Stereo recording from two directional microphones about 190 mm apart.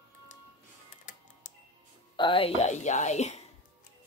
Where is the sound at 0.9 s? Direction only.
45° left (ahead or behind).